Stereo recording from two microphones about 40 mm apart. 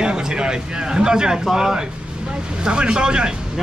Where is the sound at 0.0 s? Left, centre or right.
Centre.